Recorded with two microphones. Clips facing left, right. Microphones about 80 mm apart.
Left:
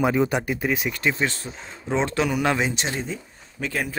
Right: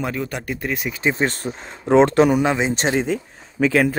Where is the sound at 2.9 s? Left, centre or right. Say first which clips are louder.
Right 9 dB; right.